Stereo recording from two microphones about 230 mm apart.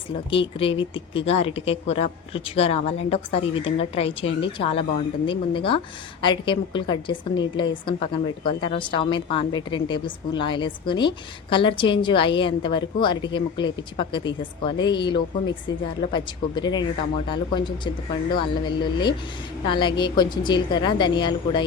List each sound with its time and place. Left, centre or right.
0.6 s speech: left